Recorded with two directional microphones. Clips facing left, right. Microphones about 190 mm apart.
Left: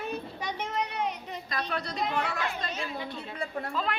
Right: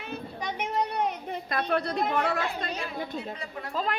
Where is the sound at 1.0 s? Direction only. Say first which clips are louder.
Right 3 dB; 55° right (ahead or behind).